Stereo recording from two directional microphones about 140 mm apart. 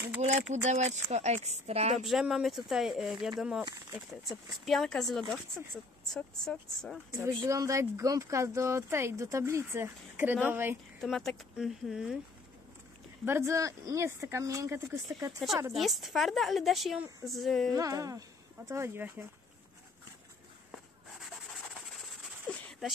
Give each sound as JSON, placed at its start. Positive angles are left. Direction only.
{"t": 0.2, "sound": "a woman's voice", "side_deg": -55}
{"t": 2.0, "sound": "a woman's voice", "side_deg": 0}
{"t": 6.1, "sound": "a woman's voice", "side_deg": 5}
{"t": 7.4, "sound": "speech", "side_deg": -20}
{"t": 11.0, "sound": "a woman's voice", "side_deg": 0}
{"t": 13.2, "sound": "speech", "side_deg": -20}
{"t": 15.7, "sound": "a woman's voice", "side_deg": 0}
{"t": 17.7, "sound": "speech", "side_deg": -25}
{"t": 21.7, "sound": "a sound", "side_deg": 0}